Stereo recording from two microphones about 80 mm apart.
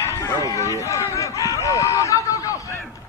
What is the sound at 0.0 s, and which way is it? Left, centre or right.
Run, left.